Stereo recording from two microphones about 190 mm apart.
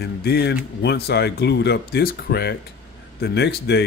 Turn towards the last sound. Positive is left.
turn(degrees=60)  # may be behind; listen again after turning